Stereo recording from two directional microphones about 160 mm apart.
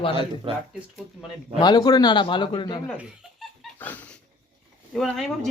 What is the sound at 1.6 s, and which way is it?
A man's voice, 25° left (ahead or behind).